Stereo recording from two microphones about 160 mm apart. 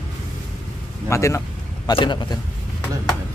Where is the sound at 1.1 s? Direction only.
20° left (ahead or behind).